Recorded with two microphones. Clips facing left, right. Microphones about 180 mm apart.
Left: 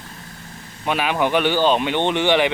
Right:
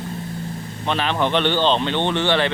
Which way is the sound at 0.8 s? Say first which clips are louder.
Left 1 dB; 10° left (ahead or behind).